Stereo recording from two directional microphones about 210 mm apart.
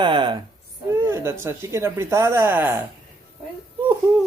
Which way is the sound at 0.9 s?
10° right (ahead or behind).